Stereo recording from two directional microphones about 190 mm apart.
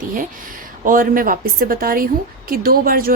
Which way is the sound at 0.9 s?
45° right (ahead or behind).